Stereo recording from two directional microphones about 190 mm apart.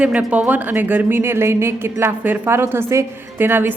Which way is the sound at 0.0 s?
5° right (ahead or behind).